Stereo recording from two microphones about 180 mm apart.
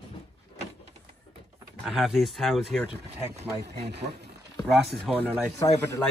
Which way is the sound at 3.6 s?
70° right (ahead or behind).